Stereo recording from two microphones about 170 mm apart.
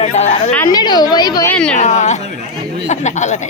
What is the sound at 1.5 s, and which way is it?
Speech, 5° left (ahead or behind).